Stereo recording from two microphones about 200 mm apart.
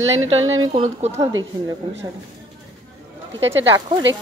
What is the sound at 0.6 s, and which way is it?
Speech, 30° right (ahead or behind).